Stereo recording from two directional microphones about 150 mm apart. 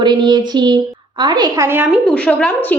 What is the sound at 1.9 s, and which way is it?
Speech, 5° left (ahead or behind).